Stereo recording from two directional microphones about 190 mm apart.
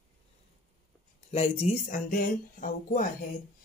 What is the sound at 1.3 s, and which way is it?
Speech, 35° left (ahead or behind).